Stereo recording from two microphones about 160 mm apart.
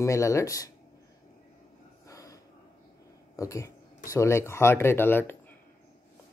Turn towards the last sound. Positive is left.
turn(degrees=15)  # may be behind; listen again after turning